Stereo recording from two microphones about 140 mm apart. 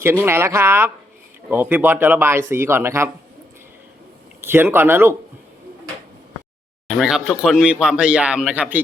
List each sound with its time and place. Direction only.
0.0 s speech: 15° right (ahead or behind)
4.4 s speech: 15° right (ahead or behind)
6.8 s speech: centre (ahead or behind)